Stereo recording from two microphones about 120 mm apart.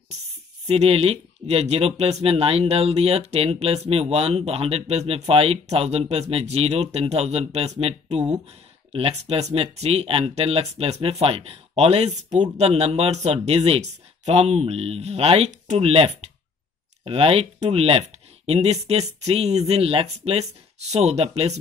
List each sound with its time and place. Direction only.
0.7 s speech: 55° right (ahead or behind)